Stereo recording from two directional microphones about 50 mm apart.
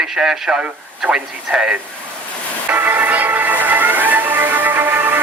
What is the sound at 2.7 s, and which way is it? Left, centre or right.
Music, right.